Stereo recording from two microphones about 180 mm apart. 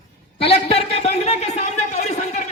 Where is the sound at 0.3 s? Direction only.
35° left (ahead or behind).